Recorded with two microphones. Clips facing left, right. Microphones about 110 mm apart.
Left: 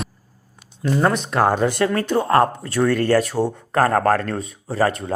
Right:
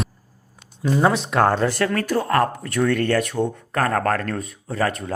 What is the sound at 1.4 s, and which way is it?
Speech, 15° left (ahead or behind).